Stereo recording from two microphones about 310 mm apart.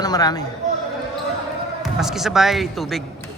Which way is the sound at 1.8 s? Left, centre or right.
Centre.